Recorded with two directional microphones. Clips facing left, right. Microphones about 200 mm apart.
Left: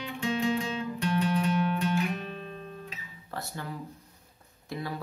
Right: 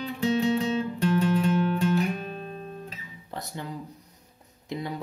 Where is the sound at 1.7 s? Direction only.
40° right (ahead or behind).